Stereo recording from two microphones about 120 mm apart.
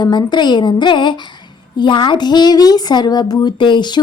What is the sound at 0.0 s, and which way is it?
Speech, 40° left (ahead or behind).